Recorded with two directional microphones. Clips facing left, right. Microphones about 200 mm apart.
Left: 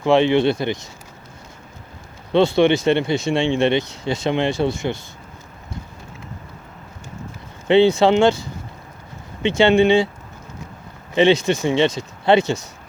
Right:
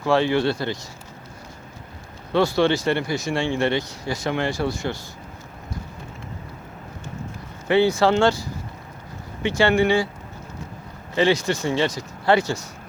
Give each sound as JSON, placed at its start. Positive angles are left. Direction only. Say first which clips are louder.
{"t": 0.0, "sound": "speech", "louder": "left 4 dB", "side_deg": 20}
{"t": 2.3, "sound": "speech", "louder": "left 4 dB", "side_deg": 25}
{"t": 7.7, "sound": "speech", "louder": "left 4 dB", "side_deg": 25}
{"t": 11.1, "sound": "speech", "louder": "left 4 dB", "side_deg": 20}